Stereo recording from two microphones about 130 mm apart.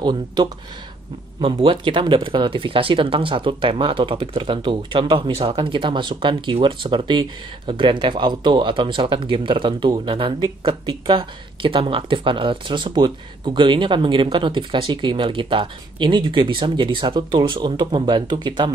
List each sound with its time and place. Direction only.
0.0 s speech: 35° right (ahead or behind)